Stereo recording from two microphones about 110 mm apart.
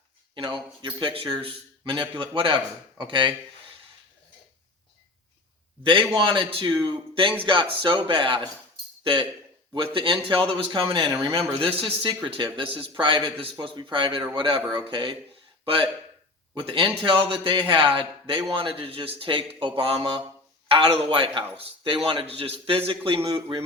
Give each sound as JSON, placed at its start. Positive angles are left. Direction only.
{"t": 0.3, "sound": "a man's voice", "side_deg": -50}
{"t": 1.1, "sound": "a man's voice", "side_deg": -55}
{"t": 5.8, "sound": "a man's voice", "side_deg": -50}
{"t": 9.7, "sound": "a man's voice", "side_deg": -50}